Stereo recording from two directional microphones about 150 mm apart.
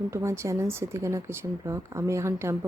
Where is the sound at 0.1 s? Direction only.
20° right (ahead or behind).